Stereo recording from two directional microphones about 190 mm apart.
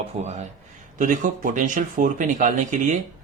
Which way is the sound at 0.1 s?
35° right (ahead or behind).